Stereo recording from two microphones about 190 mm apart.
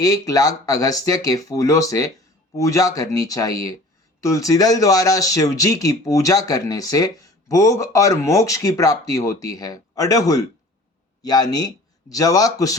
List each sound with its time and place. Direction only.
0.0 s speech: 20° left (ahead or behind)